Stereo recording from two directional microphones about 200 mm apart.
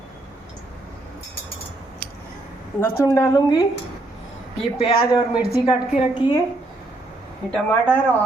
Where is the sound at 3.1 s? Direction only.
15° left (ahead or behind).